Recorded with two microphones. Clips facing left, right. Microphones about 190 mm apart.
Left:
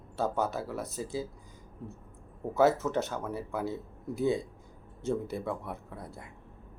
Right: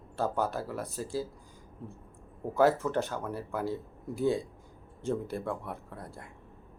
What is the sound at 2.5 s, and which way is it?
Speech, centre (ahead or behind).